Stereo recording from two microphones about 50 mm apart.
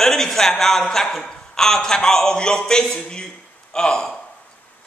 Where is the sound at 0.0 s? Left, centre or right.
Centre.